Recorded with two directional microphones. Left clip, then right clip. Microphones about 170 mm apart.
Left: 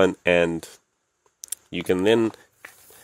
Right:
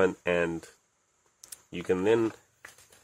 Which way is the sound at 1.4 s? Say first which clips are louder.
Left 8 dB; 50° left (ahead or behind).